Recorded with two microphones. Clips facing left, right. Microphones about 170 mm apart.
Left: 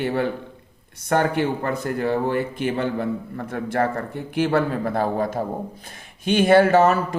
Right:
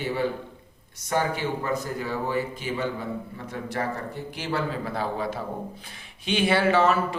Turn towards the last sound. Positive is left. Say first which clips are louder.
# left 6 dB
turn(degrees=45)  # may be behind; listen again after turning